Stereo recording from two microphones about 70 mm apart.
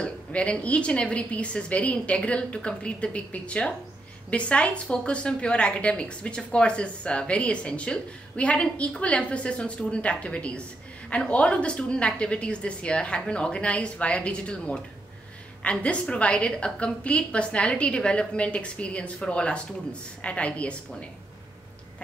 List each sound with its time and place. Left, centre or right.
0.0 s a woman's voice: centre